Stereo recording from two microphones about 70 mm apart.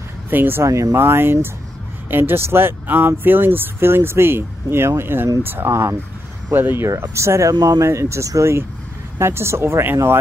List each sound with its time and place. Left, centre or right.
0.3 s speech: right
0.7 s speech: right
0.9 s speech: right
7.0 s speech: right
7.5 s speech: right
7.8 s speech: right